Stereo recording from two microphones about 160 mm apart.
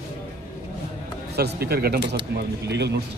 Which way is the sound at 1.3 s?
80° right.